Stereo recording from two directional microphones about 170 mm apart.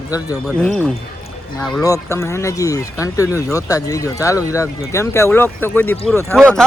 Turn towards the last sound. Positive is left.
turn(degrees=5)  # may be behind; listen again after turning